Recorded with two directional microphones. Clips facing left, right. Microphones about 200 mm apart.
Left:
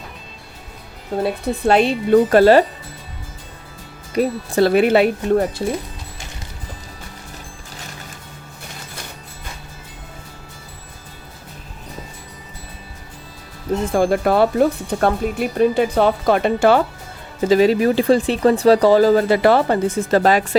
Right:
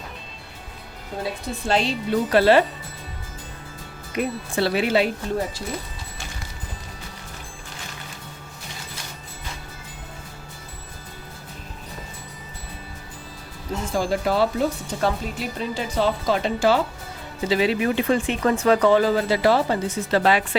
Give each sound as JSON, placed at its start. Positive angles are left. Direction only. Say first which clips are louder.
{"t": 1.2, "sound": "speech", "louder": "left 9 dB", "side_deg": 60}
{"t": 4.1, "sound": "speech", "louder": "left 7 dB", "side_deg": 35}
{"t": 13.8, "sound": "speech", "louder": "left 6 dB", "side_deg": 55}
{"t": 17.4, "sound": "speech", "louder": "left 7 dB", "side_deg": 45}